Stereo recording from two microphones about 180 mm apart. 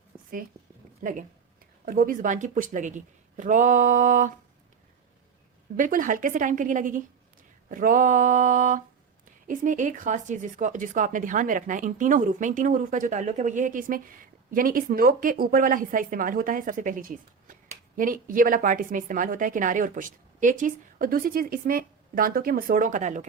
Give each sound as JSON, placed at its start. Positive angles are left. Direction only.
{"t": 1.8, "sound": "speech", "side_deg": -50}
{"t": 5.7, "sound": "speech", "side_deg": -45}